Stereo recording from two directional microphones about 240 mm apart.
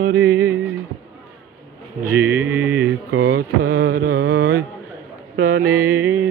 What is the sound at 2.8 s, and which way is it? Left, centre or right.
Mantra, right.